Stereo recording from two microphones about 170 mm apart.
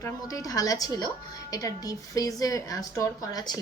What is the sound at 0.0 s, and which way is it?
A woman's voice, 20° left (ahead or behind).